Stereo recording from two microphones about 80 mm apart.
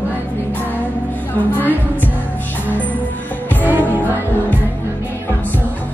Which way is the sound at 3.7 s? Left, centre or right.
Right.